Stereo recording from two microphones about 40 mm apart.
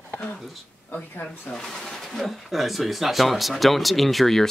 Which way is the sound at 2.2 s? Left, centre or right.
Centre.